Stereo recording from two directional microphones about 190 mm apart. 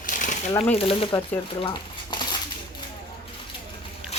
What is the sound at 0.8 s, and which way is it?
Speech, 30° left (ahead or behind).